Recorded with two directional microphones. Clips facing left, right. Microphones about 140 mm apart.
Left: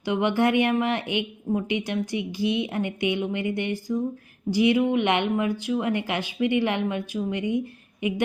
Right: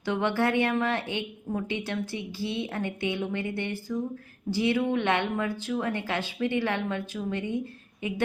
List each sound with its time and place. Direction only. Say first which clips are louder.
0.0 s a woman's voice: left 4 dB; 15° left (ahead or behind)